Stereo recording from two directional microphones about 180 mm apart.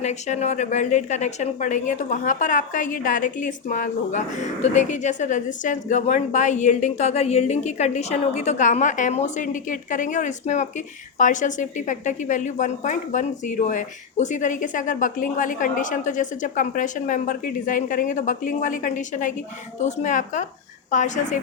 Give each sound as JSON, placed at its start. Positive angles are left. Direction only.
{"t": 0.0, "sound": "a woman's voice", "side_deg": 40}